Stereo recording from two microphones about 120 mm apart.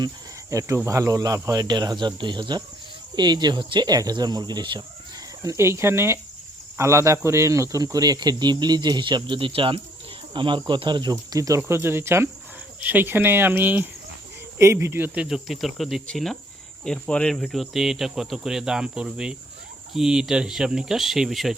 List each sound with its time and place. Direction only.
0.5 s speech: 25° right (ahead or behind)
5.4 s speech: 25° right (ahead or behind); by 21.5 s centre (ahead or behind)